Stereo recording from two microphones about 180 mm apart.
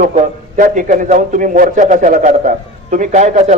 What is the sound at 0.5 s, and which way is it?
A man's voice, 45° right (ahead or behind).